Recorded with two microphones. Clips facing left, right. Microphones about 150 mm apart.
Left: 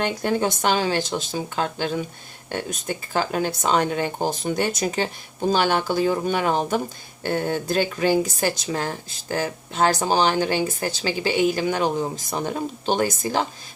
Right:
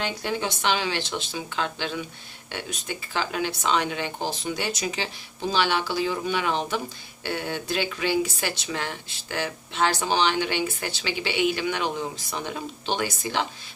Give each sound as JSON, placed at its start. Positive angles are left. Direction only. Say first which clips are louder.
{"t": 0.0, "sound": "speech", "louder": "left 6 dB", "side_deg": 45}